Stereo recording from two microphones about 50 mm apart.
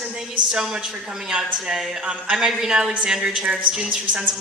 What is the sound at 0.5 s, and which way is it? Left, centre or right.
A woman's voice, centre.